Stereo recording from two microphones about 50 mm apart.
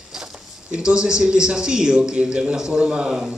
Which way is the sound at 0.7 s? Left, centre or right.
Centre.